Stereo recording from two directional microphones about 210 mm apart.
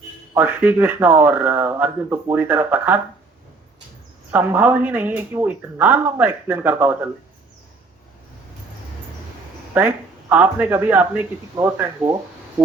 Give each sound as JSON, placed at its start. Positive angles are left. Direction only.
{"t": 0.3, "sound": "speech", "side_deg": -10}
{"t": 4.3, "sound": "speech", "side_deg": -10}
{"t": 9.7, "sound": "speech", "side_deg": -10}